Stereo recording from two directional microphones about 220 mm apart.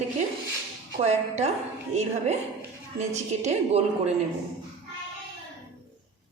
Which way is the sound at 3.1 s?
30° right (ahead or behind).